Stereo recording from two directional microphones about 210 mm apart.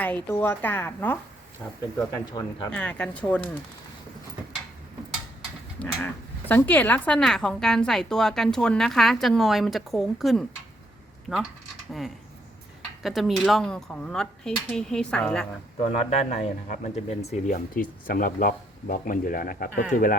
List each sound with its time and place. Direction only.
0.3 s a woman's voice: 10° left (ahead or behind)
2.7 s a woman's voice: 5° left (ahead or behind)
5.8 s speech: 5° left (ahead or behind)
13.0 s speech: centre (ahead or behind)
15.8 s speech: 30° left (ahead or behind)